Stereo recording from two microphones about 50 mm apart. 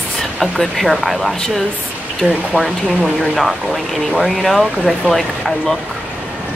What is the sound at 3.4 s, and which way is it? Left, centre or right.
Speech, centre.